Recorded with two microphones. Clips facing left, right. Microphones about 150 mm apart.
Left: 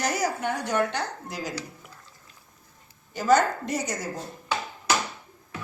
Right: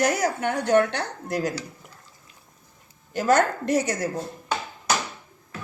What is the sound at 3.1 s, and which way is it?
Speech, 60° right (ahead or behind).